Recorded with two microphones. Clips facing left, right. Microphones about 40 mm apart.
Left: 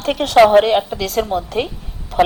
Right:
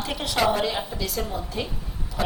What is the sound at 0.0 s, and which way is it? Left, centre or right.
A woman's voice, left.